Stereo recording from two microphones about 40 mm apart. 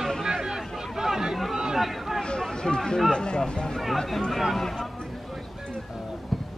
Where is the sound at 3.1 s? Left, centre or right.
Left.